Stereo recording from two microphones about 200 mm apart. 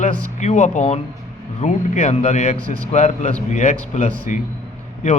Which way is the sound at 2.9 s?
35° left (ahead or behind).